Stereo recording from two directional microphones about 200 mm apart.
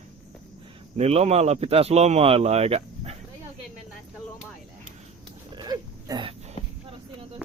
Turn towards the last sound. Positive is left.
turn(degrees=-30)  # may be behind; listen again after turning